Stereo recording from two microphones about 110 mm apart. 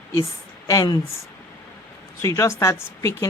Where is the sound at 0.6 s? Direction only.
35° left (ahead or behind).